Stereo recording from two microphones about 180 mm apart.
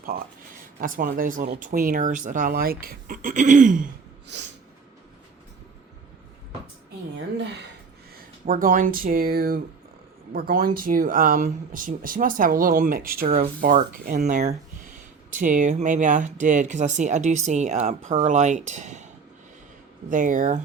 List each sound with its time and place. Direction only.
0.8 s speech: 50° right (ahead or behind)
8.4 s speech: 50° right (ahead or behind)
20.1 s speech: 45° right (ahead or behind)